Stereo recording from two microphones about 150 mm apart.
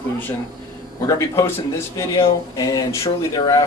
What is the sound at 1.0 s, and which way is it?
Speech, 20° left (ahead or behind).